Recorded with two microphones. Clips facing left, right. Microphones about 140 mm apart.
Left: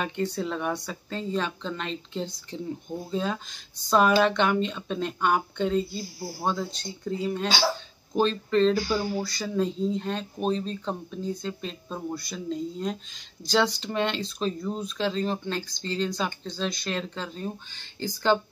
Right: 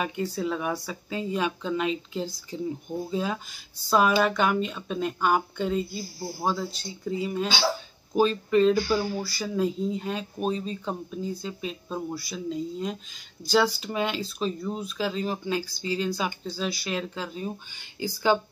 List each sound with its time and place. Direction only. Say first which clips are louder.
0.0 s speech: even; 5° right (ahead or behind)